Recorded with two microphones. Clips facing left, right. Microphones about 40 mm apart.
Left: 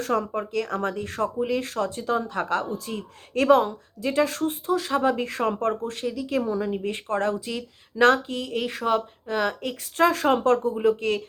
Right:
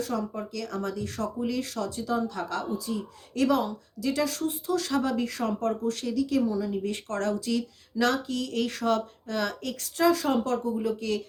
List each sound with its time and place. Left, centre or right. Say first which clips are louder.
0.0 s speech: left 5 dB; left
4.7 s speech: left 4 dB; left
7.9 s speech: left 7 dB; left
8.4 s speech: left 1 dB; left
10.0 s speech: left 3 dB; left